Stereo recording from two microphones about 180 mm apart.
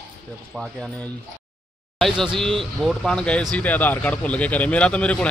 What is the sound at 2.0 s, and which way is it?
A man's voice, centre (ahead or behind).